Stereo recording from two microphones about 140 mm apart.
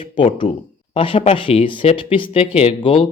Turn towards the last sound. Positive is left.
turn(degrees=40)  # may be behind; listen again after turning